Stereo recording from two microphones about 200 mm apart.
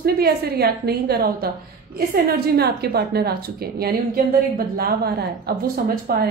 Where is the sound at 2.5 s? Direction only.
50° right (ahead or behind).